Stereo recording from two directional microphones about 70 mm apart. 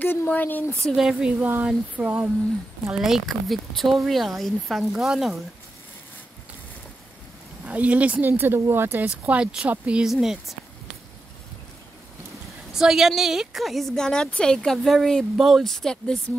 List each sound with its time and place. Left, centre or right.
0.0 s speech: left
0.9 s speech: centre
1.4 s speech: right
2.9 s a woman's voice: centre
7.6 s speech: centre
8.3 s speech: right
9.2 s speech: centre
10.0 s a woman's voice: centre
12.7 s a woman's voice: centre
15.6 s speech: centre